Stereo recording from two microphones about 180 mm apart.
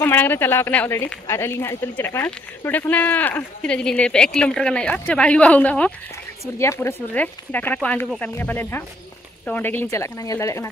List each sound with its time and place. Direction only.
0.0 s speech: 10° left (ahead or behind)